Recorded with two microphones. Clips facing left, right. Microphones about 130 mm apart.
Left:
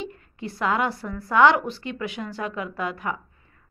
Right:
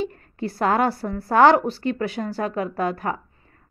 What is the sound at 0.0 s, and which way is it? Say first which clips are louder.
A woman's voice: right 6 dB; 40° right (ahead or behind).